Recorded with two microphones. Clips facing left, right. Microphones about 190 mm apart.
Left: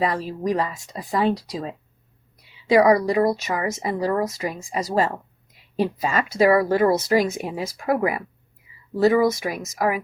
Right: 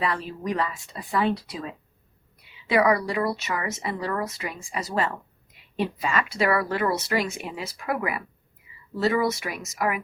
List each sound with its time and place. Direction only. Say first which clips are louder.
0.0 s a woman's voice: left 5 dB; 40° left (ahead or behind)